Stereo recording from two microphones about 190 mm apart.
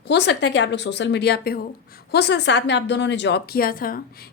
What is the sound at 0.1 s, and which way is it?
A woman's voice, 65° left (ahead or behind).